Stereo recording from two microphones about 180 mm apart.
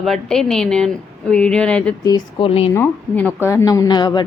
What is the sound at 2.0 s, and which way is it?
Speech, 25° left (ahead or behind).